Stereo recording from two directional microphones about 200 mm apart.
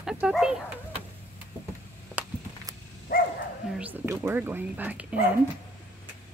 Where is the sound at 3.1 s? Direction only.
45° left (ahead or behind).